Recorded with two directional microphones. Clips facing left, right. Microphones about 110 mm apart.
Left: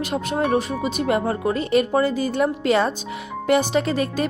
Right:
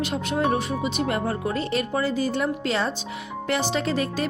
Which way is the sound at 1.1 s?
15° left (ahead or behind).